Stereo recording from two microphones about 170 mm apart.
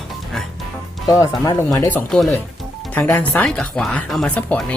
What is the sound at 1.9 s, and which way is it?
Speech, 5° left (ahead or behind).